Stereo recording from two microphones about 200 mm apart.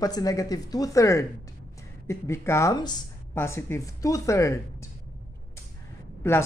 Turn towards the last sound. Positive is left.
turn(degrees=10)  # may be behind; listen again after turning